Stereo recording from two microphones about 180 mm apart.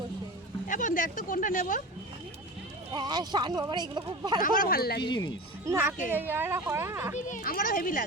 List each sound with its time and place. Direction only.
0.7 s speech: 45° left (ahead or behind)
2.9 s speech: 25° right (ahead or behind)
4.4 s speech: 50° left (ahead or behind)
5.0 s speech: 25° left (ahead or behind)
5.6 s a woman's voice: 15° right (ahead or behind)
7.2 s speech: 45° left (ahead or behind)